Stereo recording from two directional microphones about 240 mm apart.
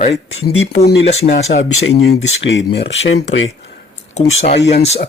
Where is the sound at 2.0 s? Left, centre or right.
Left.